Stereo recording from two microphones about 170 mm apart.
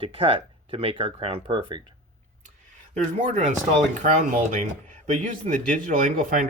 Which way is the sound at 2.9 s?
45° right (ahead or behind).